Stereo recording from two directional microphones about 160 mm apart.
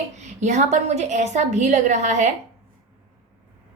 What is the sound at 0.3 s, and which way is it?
A woman's voice, 45° right (ahead or behind).